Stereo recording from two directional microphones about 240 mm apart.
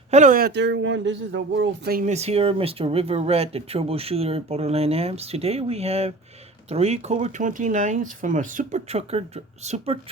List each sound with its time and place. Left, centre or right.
0.1 s speech: right